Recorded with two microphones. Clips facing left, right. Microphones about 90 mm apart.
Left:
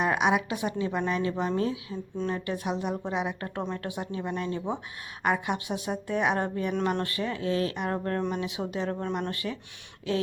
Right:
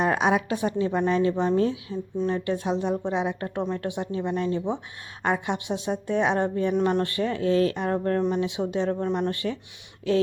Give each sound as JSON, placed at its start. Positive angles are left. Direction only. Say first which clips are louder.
{"t": 0.0, "sound": "a woman's voice", "louder": "right 2 dB", "side_deg": -35}